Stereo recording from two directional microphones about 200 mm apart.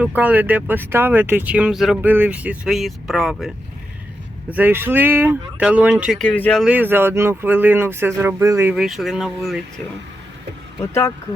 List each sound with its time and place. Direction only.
0.0 s speech: 10° right (ahead or behind)
6.6 s speech: 10° right (ahead or behind)